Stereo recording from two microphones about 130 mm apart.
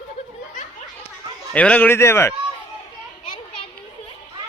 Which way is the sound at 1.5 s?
10° left (ahead or behind).